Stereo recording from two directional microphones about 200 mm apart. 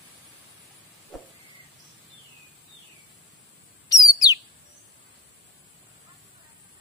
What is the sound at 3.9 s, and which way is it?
Bird, 20° left (ahead or behind).